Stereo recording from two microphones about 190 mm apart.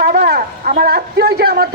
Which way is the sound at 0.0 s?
55° right (ahead or behind).